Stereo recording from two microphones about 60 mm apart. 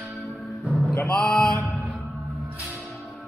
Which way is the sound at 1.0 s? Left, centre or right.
Centre.